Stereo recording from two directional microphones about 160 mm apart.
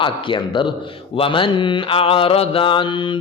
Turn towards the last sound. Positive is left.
turn(degrees=30)  # may be behind; listen again after turning